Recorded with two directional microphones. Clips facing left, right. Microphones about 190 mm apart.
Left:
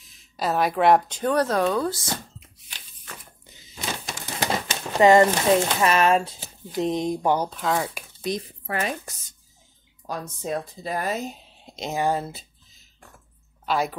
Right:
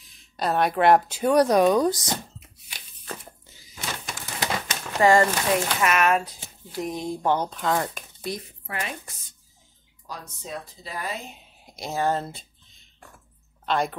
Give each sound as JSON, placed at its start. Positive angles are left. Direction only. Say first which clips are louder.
{"t": 0.0, "sound": "speech", "louder": "even", "side_deg": 0}
{"t": 3.4, "sound": "thunk", "louder": "left 2 dB", "side_deg": 20}
{"t": 4.0, "sound": "a sound", "louder": "left 2 dB", "side_deg": 30}
{"t": 6.7, "sound": "speech", "louder": "left 5 dB", "side_deg": 20}
{"t": 8.3, "sound": "speech", "louder": "left 4 dB", "side_deg": 20}
{"t": 8.6, "sound": "speech", "louder": "left 5 dB", "side_deg": 40}
{"t": 10.0, "sound": "speech", "louder": "left 8 dB", "side_deg": 50}
{"t": 11.5, "sound": "a sound", "louder": "even", "side_deg": 25}
{"t": 13.7, "sound": "speech", "louder": "even", "side_deg": 5}